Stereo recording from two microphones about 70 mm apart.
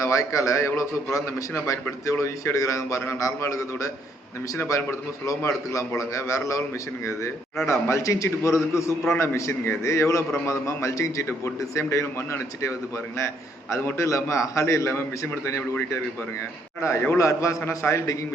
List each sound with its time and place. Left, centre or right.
0.0 s a man's voice: left
7.7 s a man's voice: left
17.2 s a man's voice: left